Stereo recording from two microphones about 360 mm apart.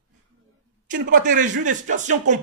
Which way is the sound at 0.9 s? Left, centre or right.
Right.